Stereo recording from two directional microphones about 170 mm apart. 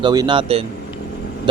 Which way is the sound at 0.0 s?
25° right (ahead or behind).